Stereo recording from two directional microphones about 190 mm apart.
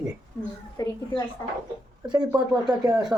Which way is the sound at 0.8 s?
20° left (ahead or behind).